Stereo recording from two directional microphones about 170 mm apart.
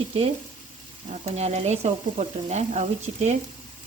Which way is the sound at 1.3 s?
40° right (ahead or behind).